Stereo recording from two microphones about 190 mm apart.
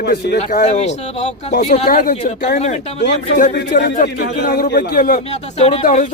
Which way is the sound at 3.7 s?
50° left (ahead or behind).